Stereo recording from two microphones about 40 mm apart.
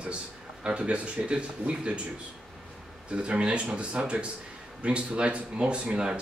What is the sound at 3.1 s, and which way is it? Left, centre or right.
Speech, right.